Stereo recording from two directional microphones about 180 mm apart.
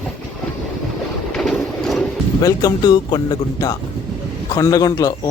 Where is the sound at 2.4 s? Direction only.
20° left (ahead or behind).